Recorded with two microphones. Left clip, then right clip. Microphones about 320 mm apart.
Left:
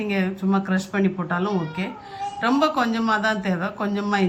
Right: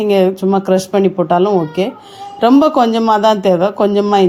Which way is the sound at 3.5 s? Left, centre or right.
Right.